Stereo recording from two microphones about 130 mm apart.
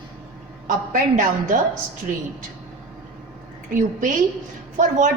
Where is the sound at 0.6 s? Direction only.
85° right.